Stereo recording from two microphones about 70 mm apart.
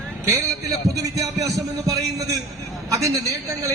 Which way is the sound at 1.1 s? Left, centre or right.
Right.